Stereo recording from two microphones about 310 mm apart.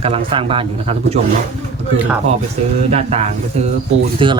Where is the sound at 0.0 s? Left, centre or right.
Centre.